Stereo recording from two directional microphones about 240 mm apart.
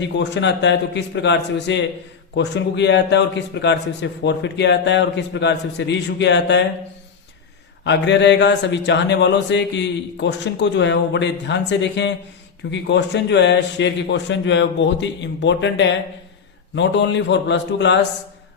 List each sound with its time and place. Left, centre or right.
0.2 s a man's voice: left
7.9 s a man's voice: left